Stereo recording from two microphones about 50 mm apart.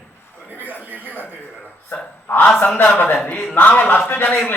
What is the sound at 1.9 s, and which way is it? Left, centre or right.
A man's voice, left.